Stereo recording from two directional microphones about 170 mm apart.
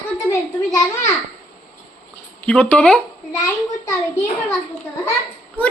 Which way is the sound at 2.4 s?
5° left (ahead or behind).